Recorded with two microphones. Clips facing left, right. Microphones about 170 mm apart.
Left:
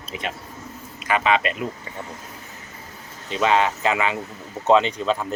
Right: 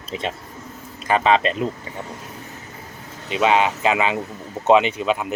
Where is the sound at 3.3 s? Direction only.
15° right (ahead or behind).